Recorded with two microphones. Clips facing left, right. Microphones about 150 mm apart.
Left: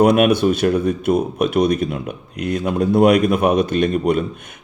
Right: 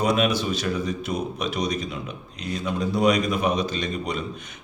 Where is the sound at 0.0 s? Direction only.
60° left (ahead or behind).